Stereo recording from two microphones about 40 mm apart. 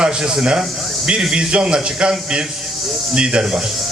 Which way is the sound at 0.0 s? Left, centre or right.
Centre.